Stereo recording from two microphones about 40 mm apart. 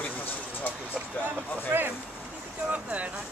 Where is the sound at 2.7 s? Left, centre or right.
Right.